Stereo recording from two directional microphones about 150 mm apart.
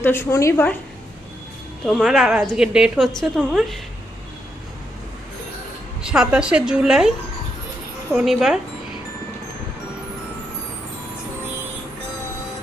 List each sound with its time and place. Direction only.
0.0 s a woman's voice: 15° left (ahead or behind)
1.9 s a woman's voice: centre (ahead or behind)
6.0 s a woman's voice: 5° right (ahead or behind)
8.1 s a woman's voice: 5° right (ahead or behind)